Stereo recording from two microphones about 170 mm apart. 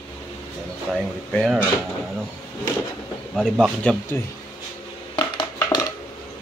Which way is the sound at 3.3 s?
5° left (ahead or behind).